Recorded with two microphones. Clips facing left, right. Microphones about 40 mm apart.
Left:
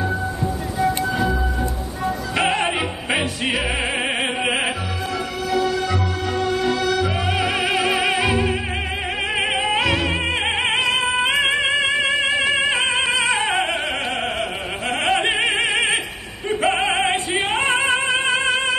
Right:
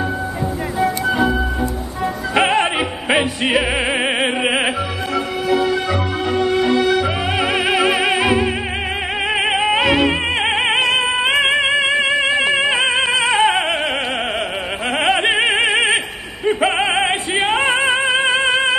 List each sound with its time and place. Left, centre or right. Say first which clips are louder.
0.7 s music: right 3 dB; right
9.4 s music: right 4 dB; centre
13.2 s opera: right 5 dB; centre
15.0 s opera: right 3 dB; right
16.4 s music: right 3 dB; centre